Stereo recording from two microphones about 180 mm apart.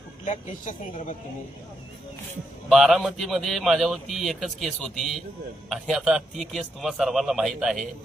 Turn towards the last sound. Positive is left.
turn(degrees=0)  # may be behind; listen again after turning